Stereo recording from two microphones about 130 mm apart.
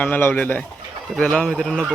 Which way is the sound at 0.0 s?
15° left (ahead or behind).